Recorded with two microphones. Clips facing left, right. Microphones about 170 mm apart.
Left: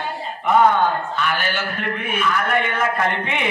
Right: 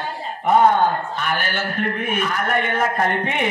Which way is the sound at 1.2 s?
45° right (ahead or behind).